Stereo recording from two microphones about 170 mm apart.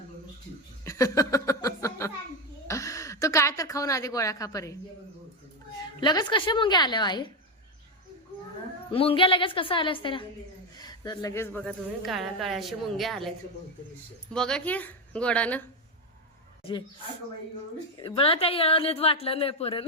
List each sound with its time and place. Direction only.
0.9 s a sound: 20° left (ahead or behind)
6.0 s a woman's voice: 25° left (ahead or behind)
8.9 s a woman's voice: 30° left (ahead or behind); by 11.7 s 15° left (ahead or behind)
12.0 s a woman's voice: centre (ahead or behind)
14.3 s a woman's voice: 5° left (ahead or behind)
18.0 s a woman's voice: 35° left (ahead or behind)